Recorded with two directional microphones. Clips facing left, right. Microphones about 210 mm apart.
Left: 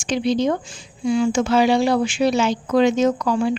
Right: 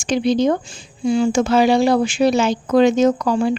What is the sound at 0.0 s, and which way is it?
Speech, 45° right (ahead or behind).